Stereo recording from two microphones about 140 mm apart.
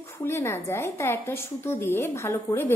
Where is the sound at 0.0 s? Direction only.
20° left (ahead or behind).